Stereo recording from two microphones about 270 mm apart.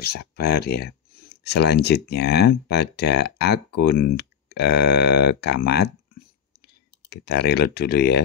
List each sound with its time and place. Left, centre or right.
0.0 s speech: left